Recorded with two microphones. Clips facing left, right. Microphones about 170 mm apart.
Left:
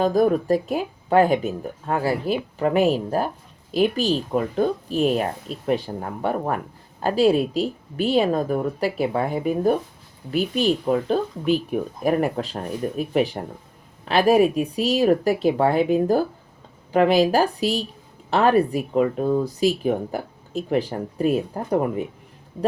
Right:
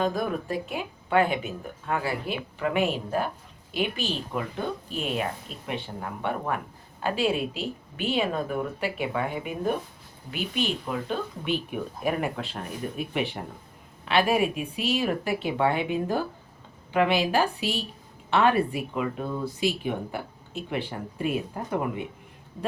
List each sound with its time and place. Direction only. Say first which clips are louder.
0.0 s speech: left 8 dB; 40° left (ahead or behind)